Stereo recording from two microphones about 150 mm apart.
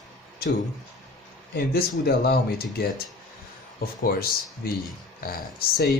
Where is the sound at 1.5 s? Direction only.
90° left.